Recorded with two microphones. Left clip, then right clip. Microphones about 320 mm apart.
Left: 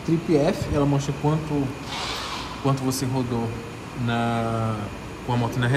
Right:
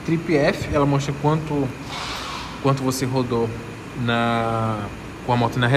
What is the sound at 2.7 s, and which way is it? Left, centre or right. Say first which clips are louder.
Speech: right 4 dB; centre.